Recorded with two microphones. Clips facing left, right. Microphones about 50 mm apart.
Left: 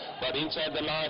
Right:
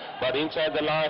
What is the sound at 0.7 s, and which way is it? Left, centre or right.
Speech, right.